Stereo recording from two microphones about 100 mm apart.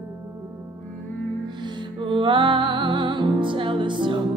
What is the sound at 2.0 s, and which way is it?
Music, 55° right (ahead or behind).